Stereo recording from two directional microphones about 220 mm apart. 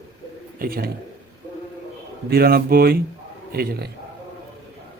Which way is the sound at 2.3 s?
45° right (ahead or behind).